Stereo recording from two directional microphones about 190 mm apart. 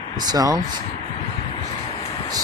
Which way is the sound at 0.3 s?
20° right (ahead or behind).